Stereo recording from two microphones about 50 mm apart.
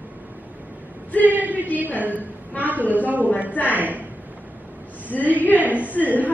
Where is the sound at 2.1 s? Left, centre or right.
Left.